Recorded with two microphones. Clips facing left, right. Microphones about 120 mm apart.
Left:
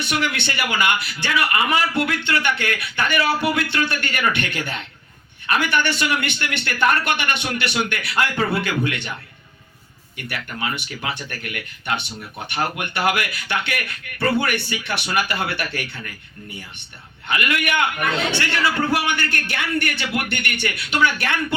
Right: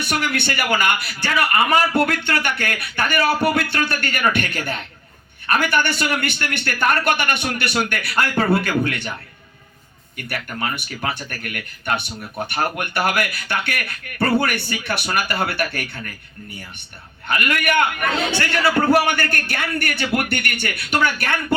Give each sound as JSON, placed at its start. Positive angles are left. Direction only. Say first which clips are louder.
{"t": 0.0, "sound": "a man's voice", "louder": "right 1 dB", "side_deg": -45}
{"t": 10.2, "sound": "a man's voice", "louder": "right 2 dB", "side_deg": -45}
{"t": 17.2, "sound": "a man's voice", "louder": "right 2 dB", "side_deg": -45}